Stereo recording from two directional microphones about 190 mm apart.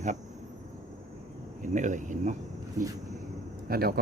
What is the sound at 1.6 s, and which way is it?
Speech, 40° right (ahead or behind).